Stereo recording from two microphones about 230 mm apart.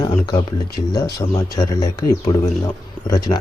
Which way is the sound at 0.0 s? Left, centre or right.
Centre.